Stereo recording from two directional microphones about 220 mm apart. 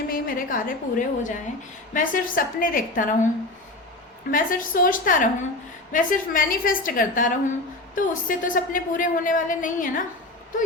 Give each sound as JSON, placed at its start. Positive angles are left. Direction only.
{"t": 0.1, "sound": "a man's voice", "side_deg": 40}
{"t": 4.3, "sound": "a man's voice", "side_deg": 40}